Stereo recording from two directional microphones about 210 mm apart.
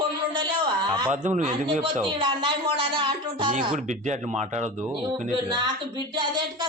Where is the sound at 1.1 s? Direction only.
35° right (ahead or behind).